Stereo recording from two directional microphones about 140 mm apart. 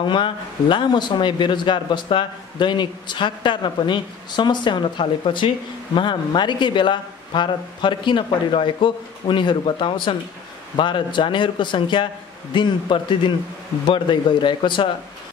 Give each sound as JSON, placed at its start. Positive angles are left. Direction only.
{"t": 0.0, "sound": "speech", "side_deg": 35}